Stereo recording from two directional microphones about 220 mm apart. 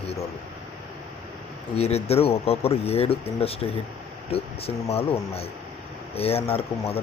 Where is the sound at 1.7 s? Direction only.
30° left (ahead or behind).